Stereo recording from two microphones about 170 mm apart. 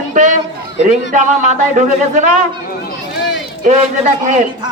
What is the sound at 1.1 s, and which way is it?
A man's voice, 45° right (ahead or behind).